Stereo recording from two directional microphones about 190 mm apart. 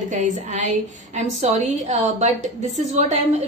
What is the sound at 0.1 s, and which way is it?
A woman's voice, 40° right (ahead or behind).